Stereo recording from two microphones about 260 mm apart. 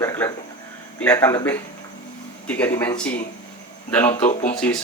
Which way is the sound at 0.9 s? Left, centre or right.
Centre.